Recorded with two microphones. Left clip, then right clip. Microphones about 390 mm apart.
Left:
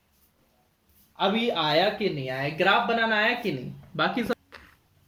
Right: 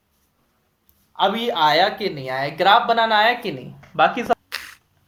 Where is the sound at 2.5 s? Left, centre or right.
Centre.